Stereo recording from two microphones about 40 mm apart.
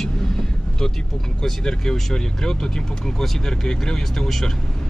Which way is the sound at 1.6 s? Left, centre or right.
Centre.